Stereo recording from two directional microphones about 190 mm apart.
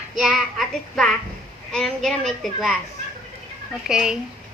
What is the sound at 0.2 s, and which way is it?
A woman's voice, centre (ahead or behind).